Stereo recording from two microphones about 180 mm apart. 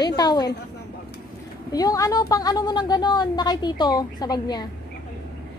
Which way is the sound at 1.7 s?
20° left (ahead or behind).